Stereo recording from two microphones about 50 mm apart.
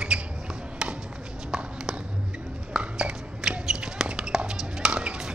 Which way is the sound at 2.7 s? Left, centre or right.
Centre.